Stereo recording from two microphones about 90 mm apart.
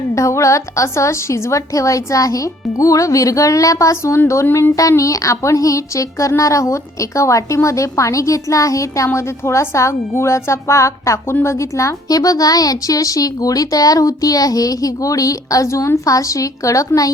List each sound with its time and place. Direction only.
0.1 s speech: 35° left (ahead or behind)
4.4 s a sound: 25° left (ahead or behind)
4.7 s speech: 35° left (ahead or behind)